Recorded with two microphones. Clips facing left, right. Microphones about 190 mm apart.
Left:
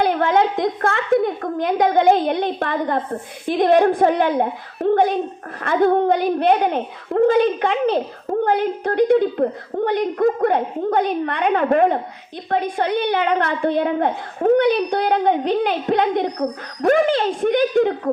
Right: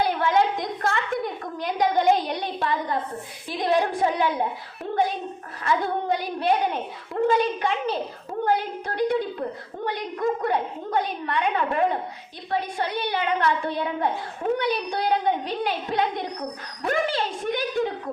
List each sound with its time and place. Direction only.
0.0 s a woman's voice: 55° left (ahead or behind)